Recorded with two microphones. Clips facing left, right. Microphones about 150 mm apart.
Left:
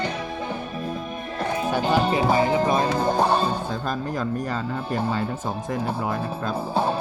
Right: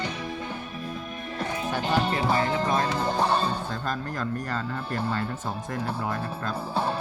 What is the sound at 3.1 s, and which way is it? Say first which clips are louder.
Music: left 4 dB; 45° left (ahead or behind).